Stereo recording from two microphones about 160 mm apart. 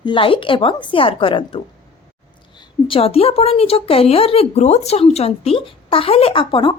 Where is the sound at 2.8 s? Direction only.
35° left (ahead or behind).